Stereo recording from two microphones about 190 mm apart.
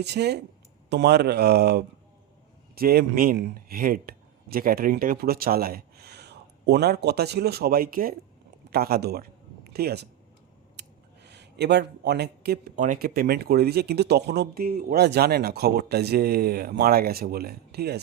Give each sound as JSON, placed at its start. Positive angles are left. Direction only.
{"t": 0.0, "sound": "speech", "side_deg": -60}